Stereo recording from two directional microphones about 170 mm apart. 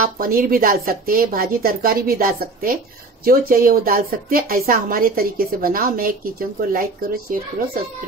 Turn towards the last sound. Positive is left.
turn(degrees=-60)  # may be behind; listen again after turning